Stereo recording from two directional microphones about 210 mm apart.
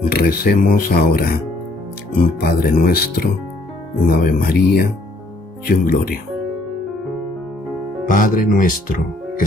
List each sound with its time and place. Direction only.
0.1 s speech: 45° left (ahead or behind)
8.0 s speech: 40° left (ahead or behind)